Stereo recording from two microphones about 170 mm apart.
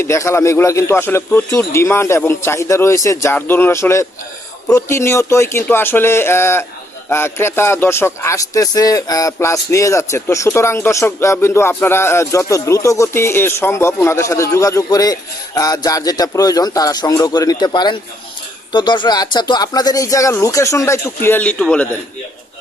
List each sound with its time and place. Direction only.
0.0 s a man's voice: 15° left (ahead or behind)